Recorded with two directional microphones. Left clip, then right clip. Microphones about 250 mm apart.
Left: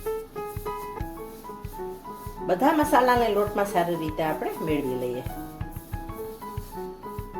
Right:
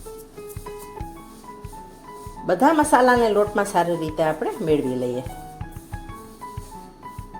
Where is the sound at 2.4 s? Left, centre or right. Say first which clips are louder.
Right 4 dB; right.